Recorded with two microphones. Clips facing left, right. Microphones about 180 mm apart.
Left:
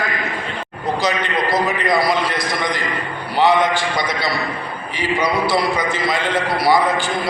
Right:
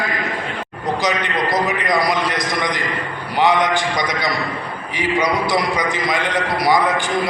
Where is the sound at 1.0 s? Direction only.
20° right (ahead or behind).